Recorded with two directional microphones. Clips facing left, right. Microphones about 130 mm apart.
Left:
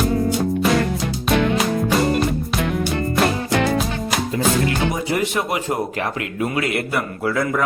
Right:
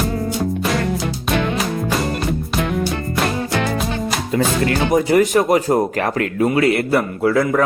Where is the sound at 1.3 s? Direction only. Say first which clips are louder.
Left 2 dB; centre (ahead or behind).